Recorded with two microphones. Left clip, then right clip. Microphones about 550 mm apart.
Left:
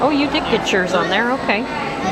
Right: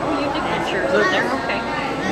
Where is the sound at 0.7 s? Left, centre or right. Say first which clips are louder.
Right 1 dB; left.